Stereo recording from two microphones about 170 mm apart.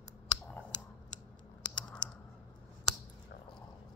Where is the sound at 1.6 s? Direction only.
25° left (ahead or behind).